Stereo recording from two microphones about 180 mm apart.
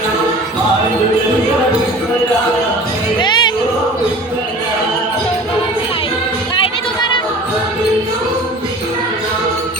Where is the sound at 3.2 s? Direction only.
25° left (ahead or behind).